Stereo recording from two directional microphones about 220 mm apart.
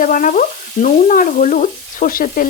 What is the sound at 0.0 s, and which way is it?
Frying, 35° left (ahead or behind).